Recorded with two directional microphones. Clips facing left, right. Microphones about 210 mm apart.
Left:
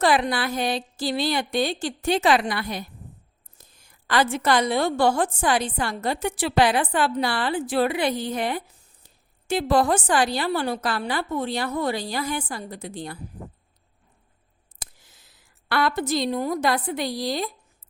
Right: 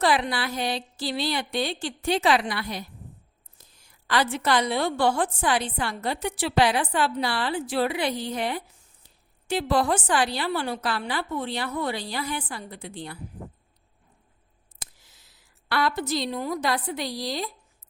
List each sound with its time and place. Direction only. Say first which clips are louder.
0.0 s a woman's voice: left 3 dB; 45° left (ahead or behind)
15.0 s a woman's voice: left 2 dB; 50° left (ahead or behind)